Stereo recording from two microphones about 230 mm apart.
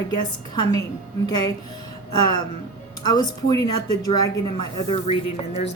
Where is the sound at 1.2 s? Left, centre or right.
Centre.